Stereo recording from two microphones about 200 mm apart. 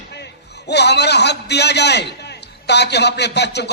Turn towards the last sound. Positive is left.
turn(degrees=55)  # may be behind; listen again after turning